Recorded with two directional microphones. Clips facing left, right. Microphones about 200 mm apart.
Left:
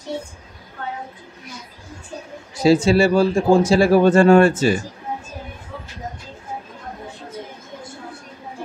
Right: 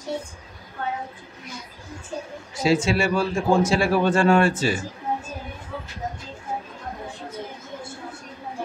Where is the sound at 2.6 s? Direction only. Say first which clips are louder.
Left 6 dB; 35° left (ahead or behind).